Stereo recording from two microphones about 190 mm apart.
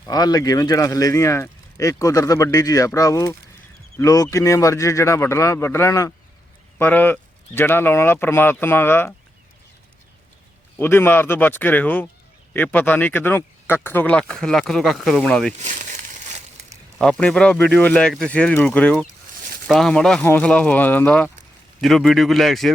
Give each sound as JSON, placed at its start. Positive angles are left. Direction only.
{"t": 0.0, "sound": "speech", "side_deg": 20}
{"t": 10.8, "sound": "speech", "side_deg": 10}
{"t": 17.0, "sound": "speech", "side_deg": 5}